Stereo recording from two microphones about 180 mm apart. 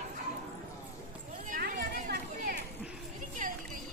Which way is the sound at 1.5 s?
55° right (ahead or behind).